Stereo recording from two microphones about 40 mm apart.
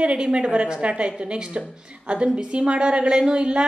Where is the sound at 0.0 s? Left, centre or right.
Right.